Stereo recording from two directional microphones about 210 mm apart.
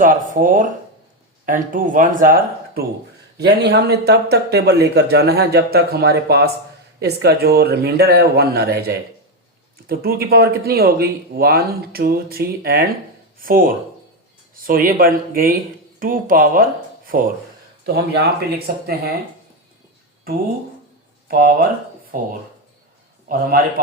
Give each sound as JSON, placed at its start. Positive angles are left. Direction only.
{"t": 0.0, "sound": "speech", "side_deg": -40}
{"t": 3.3, "sound": "speech", "side_deg": -50}
{"t": 21.2, "sound": "speech", "side_deg": -45}
{"t": 23.3, "sound": "speech", "side_deg": -45}